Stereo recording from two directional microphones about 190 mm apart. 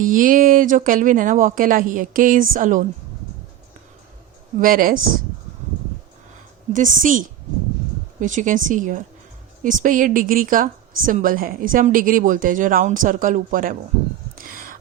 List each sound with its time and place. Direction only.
0.0 s a woman's voice: 45° right (ahead or behind)
4.6 s a woman's voice: 50° right (ahead or behind)
6.7 s a woman's voice: 45° right (ahead or behind)
14.3 s a sound: 50° right (ahead or behind)